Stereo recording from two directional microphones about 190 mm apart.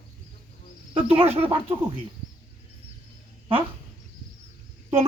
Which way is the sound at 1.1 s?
30° right (ahead or behind).